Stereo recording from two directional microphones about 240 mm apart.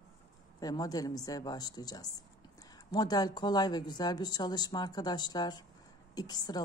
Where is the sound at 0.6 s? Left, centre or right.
Centre.